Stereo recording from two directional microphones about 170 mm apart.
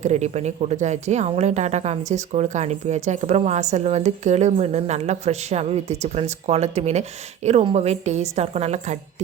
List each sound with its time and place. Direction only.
0.0 s a woman's voice: 40° right (ahead or behind)